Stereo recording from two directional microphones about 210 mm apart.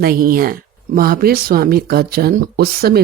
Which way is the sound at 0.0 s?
45° right (ahead or behind).